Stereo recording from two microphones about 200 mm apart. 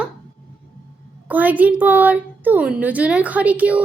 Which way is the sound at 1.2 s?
10° right (ahead or behind).